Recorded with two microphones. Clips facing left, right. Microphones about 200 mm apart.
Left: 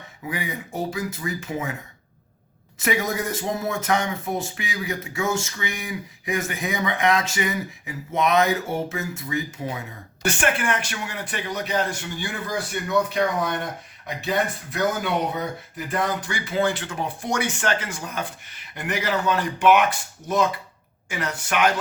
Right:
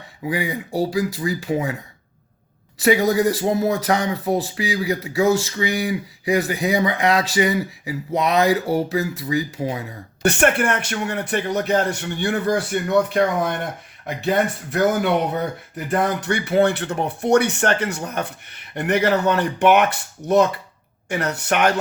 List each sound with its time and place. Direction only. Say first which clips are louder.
0.3 s speech: right 6 dB; 35° right (ahead or behind)
2.7 s speech: right 8 dB; 35° right (ahead or behind)
10.2 s speech: right 6 dB; 65° right (ahead or behind)